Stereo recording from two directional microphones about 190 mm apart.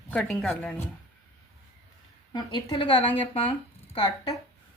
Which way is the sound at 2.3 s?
25° left (ahead or behind).